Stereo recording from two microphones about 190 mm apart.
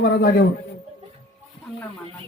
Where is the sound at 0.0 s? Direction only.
55° left (ahead or behind).